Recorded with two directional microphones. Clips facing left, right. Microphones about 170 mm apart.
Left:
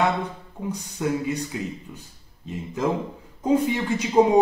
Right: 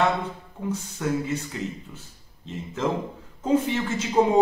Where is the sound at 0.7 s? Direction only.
15° left (ahead or behind).